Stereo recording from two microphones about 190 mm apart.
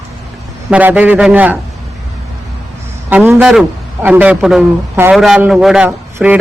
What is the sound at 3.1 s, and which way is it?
A man's voice, 10° right (ahead or behind).